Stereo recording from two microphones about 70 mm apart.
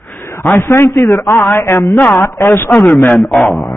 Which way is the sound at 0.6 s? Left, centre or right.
Left.